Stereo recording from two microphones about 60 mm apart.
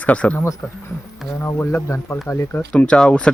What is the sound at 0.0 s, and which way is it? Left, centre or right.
Speech, left.